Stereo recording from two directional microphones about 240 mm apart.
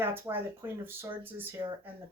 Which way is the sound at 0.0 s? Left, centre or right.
Centre.